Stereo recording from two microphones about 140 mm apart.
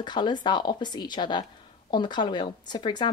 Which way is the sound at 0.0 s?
30° left (ahead or behind).